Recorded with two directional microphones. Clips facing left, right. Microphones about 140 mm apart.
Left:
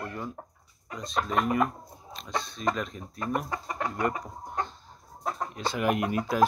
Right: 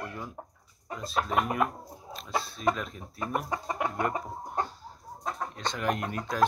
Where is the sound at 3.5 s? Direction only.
20° right (ahead or behind).